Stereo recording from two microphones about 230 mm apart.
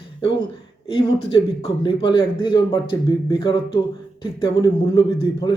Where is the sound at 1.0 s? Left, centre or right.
Left.